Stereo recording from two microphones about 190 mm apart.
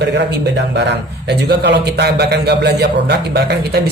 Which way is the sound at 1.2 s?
60° right (ahead or behind).